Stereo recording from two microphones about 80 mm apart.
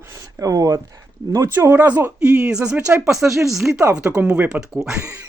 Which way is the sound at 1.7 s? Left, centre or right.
Right.